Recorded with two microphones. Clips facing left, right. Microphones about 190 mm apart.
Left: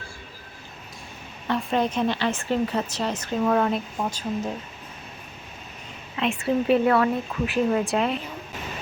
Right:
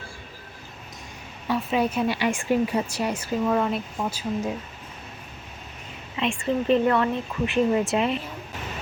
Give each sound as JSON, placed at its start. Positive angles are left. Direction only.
{"t": 1.5, "sound": "speech", "side_deg": -5}
{"t": 6.1, "sound": "speech", "side_deg": 5}